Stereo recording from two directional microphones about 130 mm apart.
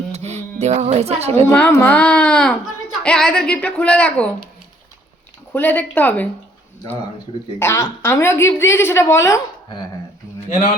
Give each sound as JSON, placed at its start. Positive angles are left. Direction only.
{"t": 0.1, "sound": "a woman's voice", "side_deg": -55}
{"t": 1.5, "sound": "a woman's voice", "side_deg": 15}
{"t": 5.5, "sound": "a woman's voice", "side_deg": 15}
{"t": 7.6, "sound": "a woman's voice", "side_deg": 20}